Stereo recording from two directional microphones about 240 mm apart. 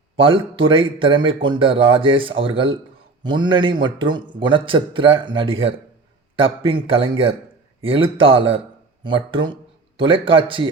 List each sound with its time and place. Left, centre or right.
0.2 s a man's voice: right